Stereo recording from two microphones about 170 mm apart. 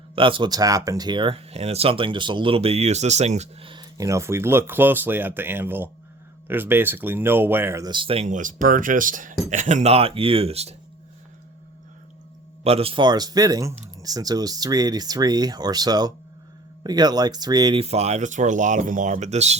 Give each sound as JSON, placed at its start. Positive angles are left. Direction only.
{"t": 0.2, "sound": "speech", "side_deg": -30}
{"t": 12.6, "sound": "speech", "side_deg": -35}
{"t": 17.8, "sound": "speech", "side_deg": -40}